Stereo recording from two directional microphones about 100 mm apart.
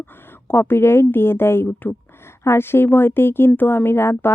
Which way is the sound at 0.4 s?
25° left (ahead or behind).